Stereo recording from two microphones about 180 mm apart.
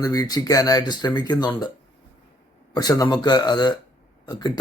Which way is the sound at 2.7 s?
20° left (ahead or behind).